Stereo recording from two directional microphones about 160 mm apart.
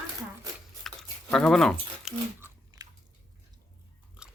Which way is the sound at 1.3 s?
5° left (ahead or behind).